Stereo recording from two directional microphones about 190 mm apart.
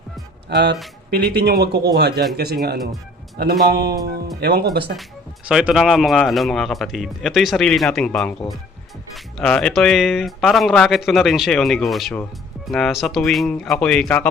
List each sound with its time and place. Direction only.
0.4 s speech: 60° right (ahead or behind)
5.5 s speech: 5° right (ahead or behind)